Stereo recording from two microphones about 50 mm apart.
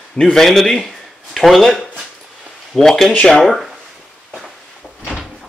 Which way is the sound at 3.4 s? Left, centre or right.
Centre.